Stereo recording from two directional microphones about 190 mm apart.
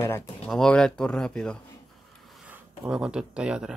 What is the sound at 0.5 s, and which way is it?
Speech, 5° left (ahead or behind).